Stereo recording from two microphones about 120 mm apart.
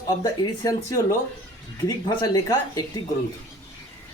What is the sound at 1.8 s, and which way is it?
Speech, 30° left (ahead or behind).